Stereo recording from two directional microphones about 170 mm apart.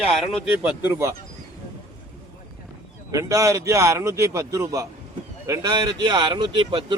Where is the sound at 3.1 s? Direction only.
20° right (ahead or behind).